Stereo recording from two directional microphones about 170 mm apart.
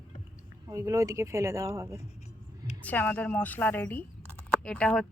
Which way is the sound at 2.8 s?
10° left (ahead or behind).